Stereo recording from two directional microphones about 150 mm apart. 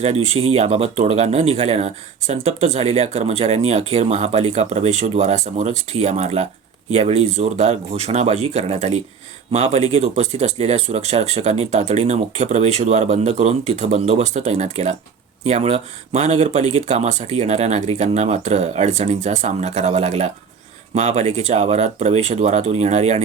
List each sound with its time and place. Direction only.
0.0 s speech: 45° right (ahead or behind)